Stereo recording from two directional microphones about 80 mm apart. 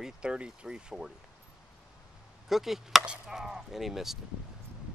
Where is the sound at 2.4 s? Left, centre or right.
Centre.